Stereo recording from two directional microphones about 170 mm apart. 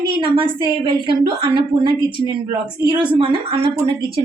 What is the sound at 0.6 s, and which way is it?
A woman's voice, 30° right (ahead or behind).